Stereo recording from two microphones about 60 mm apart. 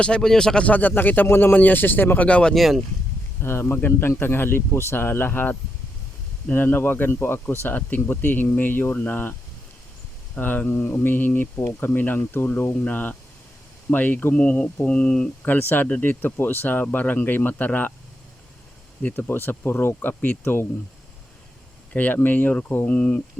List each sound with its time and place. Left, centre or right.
0.0 s speech: centre
0.6 s speech: left
2.2 s speech: centre
2.6 s speech: centre
3.4 s speech: left
3.8 s speech: left
10.3 s speech: left
12.8 s speech: left
15.4 s speech: left
19.0 s speech: left
21.9 s speech: left
22.9 s speech: centre